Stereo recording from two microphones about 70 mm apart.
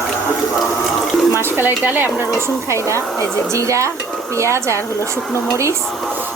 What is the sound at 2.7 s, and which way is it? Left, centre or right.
Speech, right.